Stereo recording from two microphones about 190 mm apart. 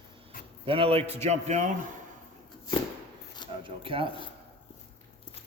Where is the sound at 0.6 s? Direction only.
30° right (ahead or behind).